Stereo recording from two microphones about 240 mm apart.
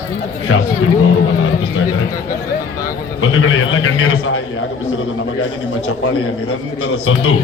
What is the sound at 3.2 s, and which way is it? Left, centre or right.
A man's voice, left.